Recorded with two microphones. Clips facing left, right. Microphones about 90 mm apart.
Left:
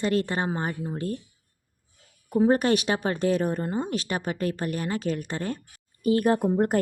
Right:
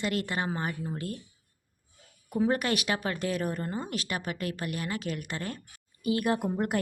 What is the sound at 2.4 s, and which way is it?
Speech, 35° left (ahead or behind).